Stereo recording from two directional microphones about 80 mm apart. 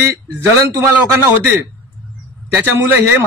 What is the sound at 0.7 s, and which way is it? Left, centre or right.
A man's voice, right.